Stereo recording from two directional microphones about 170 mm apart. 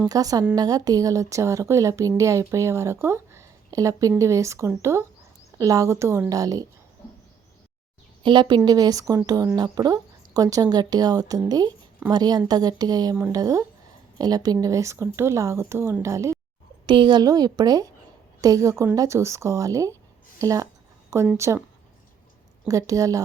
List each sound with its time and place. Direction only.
0.1 s speech: 20° right (ahead or behind)
8.2 s speech: 30° right (ahead or behind)
16.8 s speech: 30° right (ahead or behind)
22.7 s speech: 20° right (ahead or behind)